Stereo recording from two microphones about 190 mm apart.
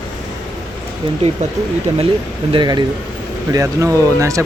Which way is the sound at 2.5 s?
20° right (ahead or behind).